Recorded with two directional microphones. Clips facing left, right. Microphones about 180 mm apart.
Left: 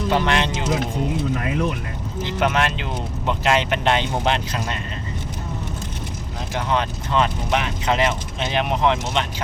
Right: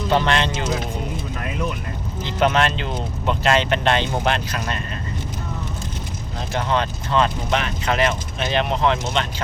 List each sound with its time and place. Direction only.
0.1 s speech: 15° left (ahead or behind)
2.2 s speech: 10° left (ahead or behind)
6.5 s speech: 15° left (ahead or behind)